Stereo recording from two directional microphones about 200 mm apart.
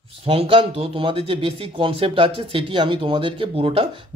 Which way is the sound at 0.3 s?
30° right (ahead or behind).